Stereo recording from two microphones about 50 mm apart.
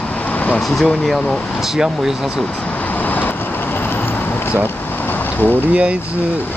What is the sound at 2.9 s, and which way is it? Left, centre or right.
Vehicle, left.